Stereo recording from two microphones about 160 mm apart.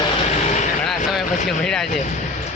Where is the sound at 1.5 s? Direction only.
5° left (ahead or behind).